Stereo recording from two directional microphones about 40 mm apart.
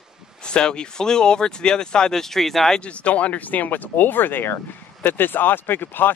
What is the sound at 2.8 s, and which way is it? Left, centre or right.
Speech, left.